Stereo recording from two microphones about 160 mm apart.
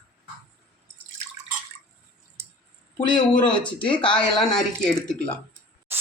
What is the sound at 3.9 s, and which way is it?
Speech, 30° left (ahead or behind).